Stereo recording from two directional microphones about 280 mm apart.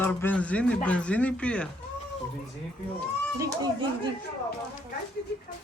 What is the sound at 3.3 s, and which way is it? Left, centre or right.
Speech, centre.